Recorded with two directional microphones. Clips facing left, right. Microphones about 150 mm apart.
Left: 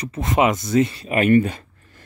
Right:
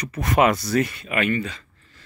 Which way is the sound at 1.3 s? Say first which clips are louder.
Left 10 dB; 50° left (ahead or behind).